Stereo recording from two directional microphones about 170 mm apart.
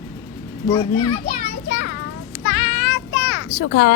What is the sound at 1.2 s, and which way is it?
Children playing, 50° left (ahead or behind).